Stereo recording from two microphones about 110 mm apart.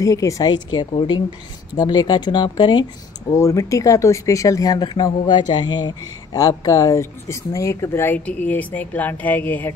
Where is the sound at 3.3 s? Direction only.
30° left (ahead or behind).